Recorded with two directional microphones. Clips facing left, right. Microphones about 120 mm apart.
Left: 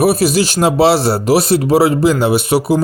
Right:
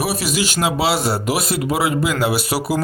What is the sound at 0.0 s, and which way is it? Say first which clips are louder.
Speech: left 9 dB; 40° left (ahead or behind).